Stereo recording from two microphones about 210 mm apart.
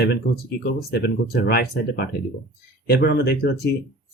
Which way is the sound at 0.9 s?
50° left (ahead or behind).